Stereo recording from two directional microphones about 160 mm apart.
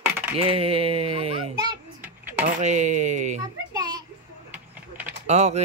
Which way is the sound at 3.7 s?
25° right (ahead or behind).